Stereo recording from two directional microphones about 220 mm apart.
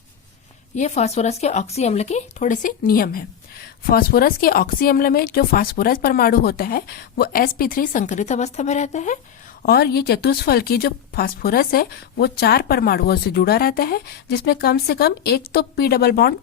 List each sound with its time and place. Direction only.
0.8 s speech: 30° left (ahead or behind)
9.6 s a woman's voice: 45° left (ahead or behind)